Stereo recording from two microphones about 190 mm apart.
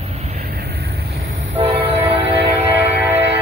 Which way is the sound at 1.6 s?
30° right (ahead or behind).